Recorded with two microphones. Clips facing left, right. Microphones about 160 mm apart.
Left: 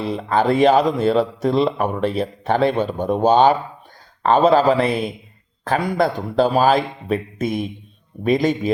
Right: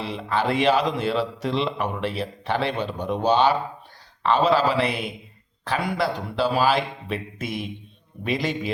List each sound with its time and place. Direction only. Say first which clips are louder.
0.0 s speech: left 6 dB; 45° left (ahead or behind)